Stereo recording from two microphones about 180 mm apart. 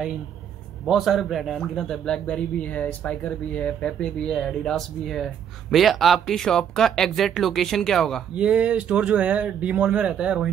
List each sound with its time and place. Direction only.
0.8 s a man's voice: centre (ahead or behind)